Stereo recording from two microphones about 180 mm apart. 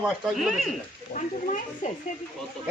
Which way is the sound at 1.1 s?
45° left (ahead or behind).